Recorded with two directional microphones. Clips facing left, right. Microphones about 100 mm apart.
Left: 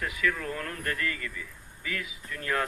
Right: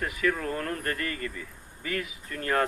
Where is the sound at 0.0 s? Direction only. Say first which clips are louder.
Right 2 dB; 40° right (ahead or behind).